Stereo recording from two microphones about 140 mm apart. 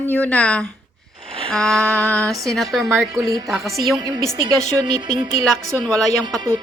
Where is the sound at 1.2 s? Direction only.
40° right (ahead or behind).